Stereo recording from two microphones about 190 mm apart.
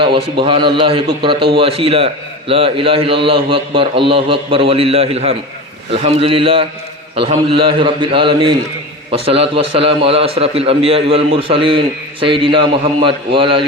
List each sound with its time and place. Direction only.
0.0 s a man's voice: 30° right (ahead or behind)